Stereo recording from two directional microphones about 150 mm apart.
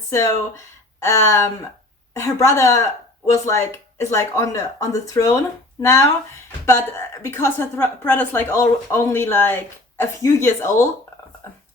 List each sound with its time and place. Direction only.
0.1 s a woman's voice: 20° left (ahead or behind)